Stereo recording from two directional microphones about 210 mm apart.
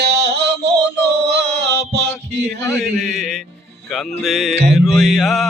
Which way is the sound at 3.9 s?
Centre (ahead or behind).